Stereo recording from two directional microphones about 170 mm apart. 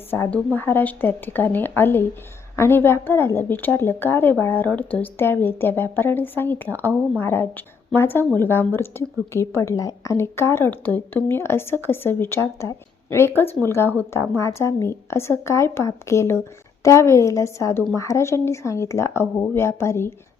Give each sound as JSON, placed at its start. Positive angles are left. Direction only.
{"t": 0.1, "sound": "a woman's voice", "side_deg": 10}